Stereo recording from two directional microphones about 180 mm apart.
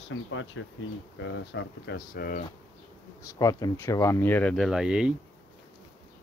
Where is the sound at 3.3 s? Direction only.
20° left (ahead or behind); by 5.1 s 5° right (ahead or behind).